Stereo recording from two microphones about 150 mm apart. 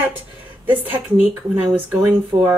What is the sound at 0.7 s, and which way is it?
Speech, 10° right (ahead or behind).